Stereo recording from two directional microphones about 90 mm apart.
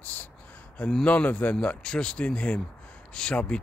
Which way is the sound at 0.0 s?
15° left (ahead or behind).